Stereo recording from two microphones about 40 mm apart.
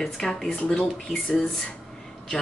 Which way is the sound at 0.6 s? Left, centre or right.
Left.